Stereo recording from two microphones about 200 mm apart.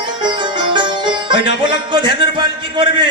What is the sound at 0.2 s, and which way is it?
Sitar, 20° right (ahead or behind).